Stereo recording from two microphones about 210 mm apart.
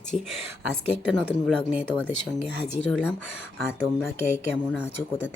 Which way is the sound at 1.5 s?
Centre (ahead or behind).